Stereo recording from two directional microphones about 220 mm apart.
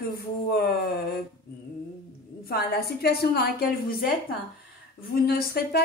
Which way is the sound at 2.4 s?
45° left (ahead or behind).